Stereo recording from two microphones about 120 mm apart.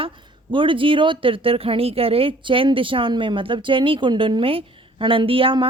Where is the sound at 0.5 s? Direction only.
45° right (ahead or behind).